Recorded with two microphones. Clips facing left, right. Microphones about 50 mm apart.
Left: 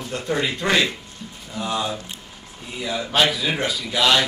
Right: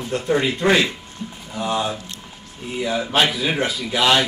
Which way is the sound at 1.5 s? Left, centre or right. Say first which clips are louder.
Right 2 dB; centre.